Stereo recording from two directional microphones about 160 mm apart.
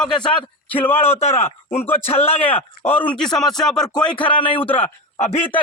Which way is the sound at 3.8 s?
25° left (ahead or behind).